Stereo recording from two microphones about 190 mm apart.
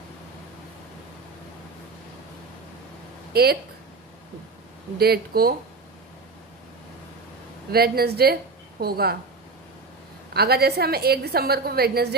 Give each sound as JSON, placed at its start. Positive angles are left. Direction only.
{"t": 3.3, "sound": "a woman's voice", "side_deg": -55}
{"t": 4.9, "sound": "speech", "side_deg": -55}
{"t": 7.7, "sound": "a woman's voice", "side_deg": -55}
{"t": 10.3, "sound": "a woman's voice", "side_deg": -55}